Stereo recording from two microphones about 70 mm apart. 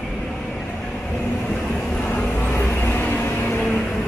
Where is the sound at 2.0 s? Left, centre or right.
Left.